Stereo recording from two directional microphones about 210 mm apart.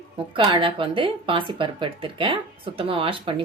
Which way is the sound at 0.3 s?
25° right (ahead or behind).